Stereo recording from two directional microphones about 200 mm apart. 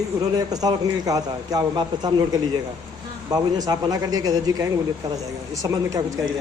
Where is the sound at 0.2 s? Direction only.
20° right (ahead or behind).